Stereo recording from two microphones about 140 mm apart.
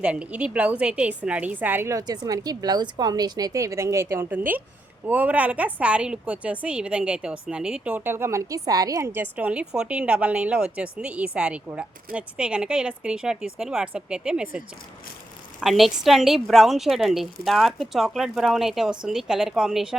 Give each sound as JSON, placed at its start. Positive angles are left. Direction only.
{"t": 0.0, "sound": "a woman's voice", "side_deg": -10}
{"t": 15.6, "sound": "a woman's voice", "side_deg": 0}